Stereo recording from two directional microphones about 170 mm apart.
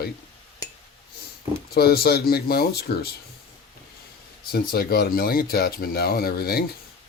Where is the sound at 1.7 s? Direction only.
70° left (ahead or behind).